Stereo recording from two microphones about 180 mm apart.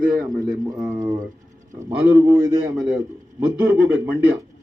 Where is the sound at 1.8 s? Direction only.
15° right (ahead or behind).